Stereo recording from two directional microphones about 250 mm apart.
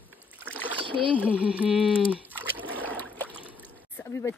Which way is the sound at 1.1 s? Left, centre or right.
Centre.